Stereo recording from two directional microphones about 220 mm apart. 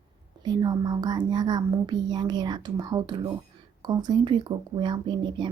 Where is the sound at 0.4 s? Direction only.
20° right (ahead or behind).